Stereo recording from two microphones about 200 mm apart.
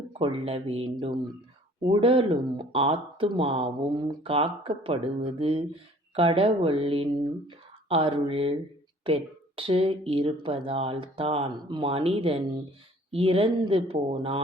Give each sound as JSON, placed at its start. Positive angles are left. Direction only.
{"t": 0.1, "sound": "speech", "side_deg": -25}